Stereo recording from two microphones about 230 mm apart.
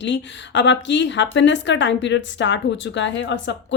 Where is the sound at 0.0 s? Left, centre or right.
Left.